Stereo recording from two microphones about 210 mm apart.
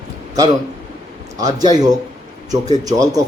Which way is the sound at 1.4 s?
20° right (ahead or behind).